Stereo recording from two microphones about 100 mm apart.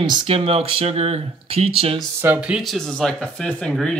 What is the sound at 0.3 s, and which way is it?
Speech, 75° right (ahead or behind).